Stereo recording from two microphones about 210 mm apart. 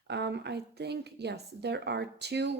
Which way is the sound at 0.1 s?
55° right (ahead or behind).